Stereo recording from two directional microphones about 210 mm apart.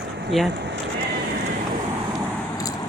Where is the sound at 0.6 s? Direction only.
55° right (ahead or behind).